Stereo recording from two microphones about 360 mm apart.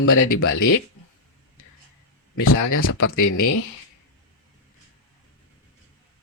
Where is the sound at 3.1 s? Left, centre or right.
Left.